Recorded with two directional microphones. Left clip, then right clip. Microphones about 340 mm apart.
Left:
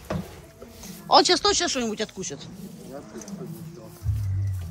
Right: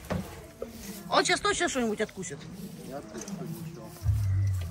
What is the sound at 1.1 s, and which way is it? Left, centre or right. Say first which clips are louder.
Speech: left 7 dB; centre.